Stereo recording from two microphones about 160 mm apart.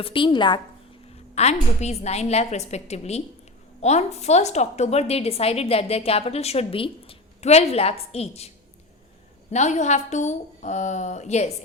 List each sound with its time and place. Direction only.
0.0 s a woman's voice: 30° left (ahead or behind)
1.1 s a woman's voice: 40° left (ahead or behind)
9.5 s a woman's voice: 45° left (ahead or behind)